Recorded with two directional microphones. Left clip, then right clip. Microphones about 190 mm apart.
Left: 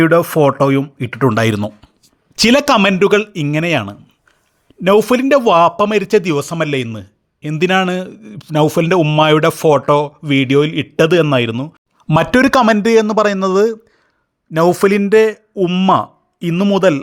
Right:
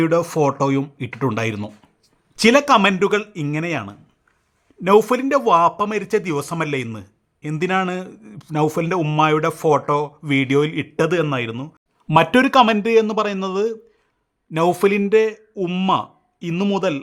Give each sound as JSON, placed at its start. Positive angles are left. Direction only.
{"t": 0.0, "sound": "a man's voice", "side_deg": 20}
{"t": 14.5, "sound": "a man's voice", "side_deg": 15}
{"t": 15.5, "sound": "speech", "side_deg": 15}
{"t": 15.9, "sound": "speech", "side_deg": 30}